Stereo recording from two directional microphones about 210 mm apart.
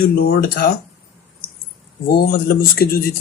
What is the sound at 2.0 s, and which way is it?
Speech, 45° left (ahead or behind).